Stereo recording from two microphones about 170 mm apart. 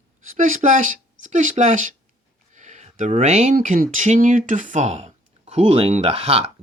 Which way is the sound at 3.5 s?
55° right (ahead or behind).